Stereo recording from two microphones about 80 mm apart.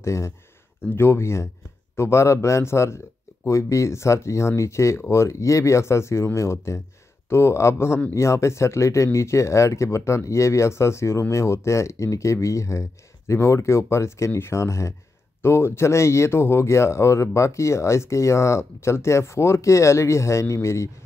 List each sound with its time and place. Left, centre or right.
0.0 s speech: left